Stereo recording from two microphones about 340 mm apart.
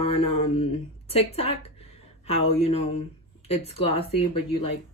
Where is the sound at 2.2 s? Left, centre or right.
Centre.